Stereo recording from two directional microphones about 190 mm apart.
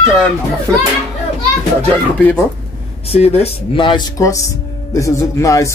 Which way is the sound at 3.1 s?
35° left (ahead or behind).